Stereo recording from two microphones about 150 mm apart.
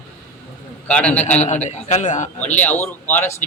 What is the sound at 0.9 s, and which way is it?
Speech, 5° left (ahead or behind).